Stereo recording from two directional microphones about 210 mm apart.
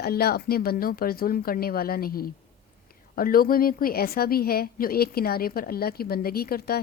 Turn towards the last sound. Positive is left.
turn(degrees=45)  # may be behind; listen again after turning